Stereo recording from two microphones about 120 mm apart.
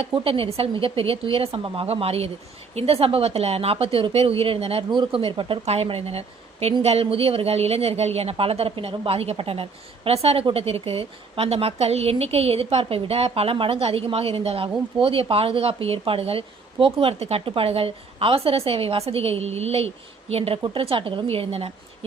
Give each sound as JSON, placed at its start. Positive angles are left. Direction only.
{"t": 0.0, "sound": "a woman's voice", "side_deg": -50}